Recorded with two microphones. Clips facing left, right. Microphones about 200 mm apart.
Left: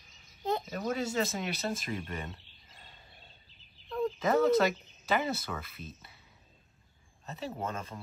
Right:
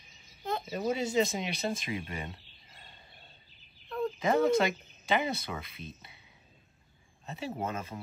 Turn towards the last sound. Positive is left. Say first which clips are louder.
# right 2 dB
turn(degrees=-10)  # may be behind; listen again after turning